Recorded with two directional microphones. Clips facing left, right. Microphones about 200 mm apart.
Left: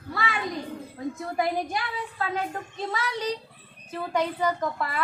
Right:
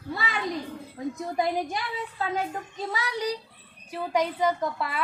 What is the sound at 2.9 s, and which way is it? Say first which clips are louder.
A woman's voice: even; 15° right (ahead or behind).